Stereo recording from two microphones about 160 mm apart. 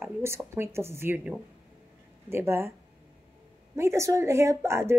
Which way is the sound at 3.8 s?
15° right (ahead or behind).